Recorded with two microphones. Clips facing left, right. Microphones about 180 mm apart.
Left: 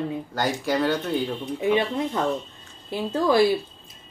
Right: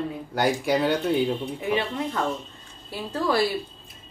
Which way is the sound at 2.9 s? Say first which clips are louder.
Left 4 dB; 20° left (ahead or behind).